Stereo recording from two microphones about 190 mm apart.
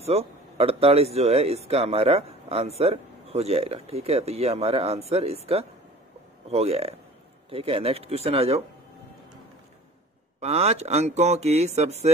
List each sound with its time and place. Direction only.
0.0 s speech: 30° right (ahead or behind)
10.4 s speech: 35° right (ahead or behind)